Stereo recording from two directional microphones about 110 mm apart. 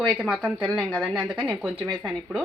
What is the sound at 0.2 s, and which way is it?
Speech, 15° right (ahead or behind).